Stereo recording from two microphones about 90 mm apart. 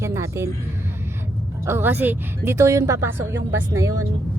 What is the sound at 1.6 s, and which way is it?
Speech, 25° right (ahead or behind).